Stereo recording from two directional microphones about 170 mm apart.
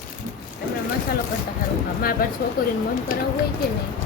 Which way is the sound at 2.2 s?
60° left (ahead or behind).